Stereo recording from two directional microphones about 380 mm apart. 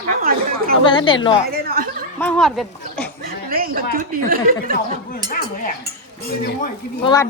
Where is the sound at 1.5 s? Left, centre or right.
Right.